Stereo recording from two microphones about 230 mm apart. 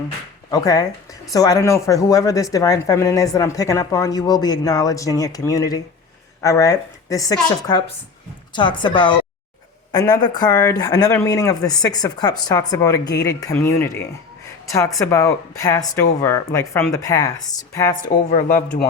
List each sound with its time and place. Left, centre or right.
0.5 s speech: centre
18.3 s speech: left